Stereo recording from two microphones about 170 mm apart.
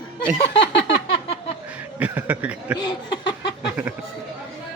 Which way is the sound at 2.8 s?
25° left (ahead or behind).